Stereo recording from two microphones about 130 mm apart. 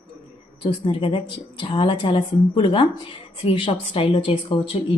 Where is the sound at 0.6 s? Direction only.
45° left (ahead or behind).